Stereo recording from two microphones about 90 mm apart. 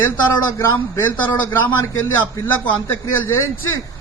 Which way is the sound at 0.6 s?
30° left (ahead or behind).